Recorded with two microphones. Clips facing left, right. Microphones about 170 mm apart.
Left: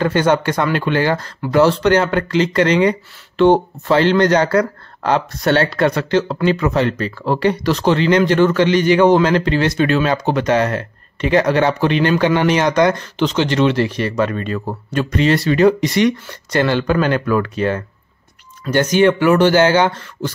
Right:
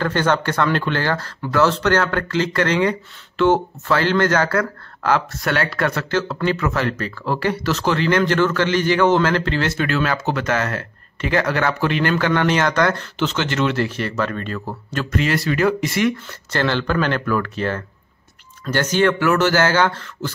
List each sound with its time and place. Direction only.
0.0 s a man's voice: 15° left (ahead or behind)